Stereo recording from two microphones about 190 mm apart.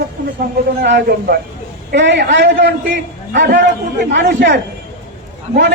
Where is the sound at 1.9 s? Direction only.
65° right (ahead or behind).